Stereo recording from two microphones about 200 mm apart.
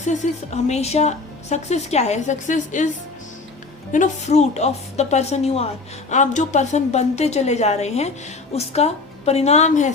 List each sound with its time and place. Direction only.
0.0 s a woman's voice: 35° left (ahead or behind)
3.9 s a woman's voice: 35° left (ahead or behind)